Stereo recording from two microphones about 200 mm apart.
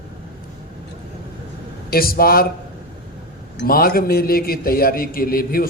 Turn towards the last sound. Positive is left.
turn(degrees=45)  # may be behind; listen again after turning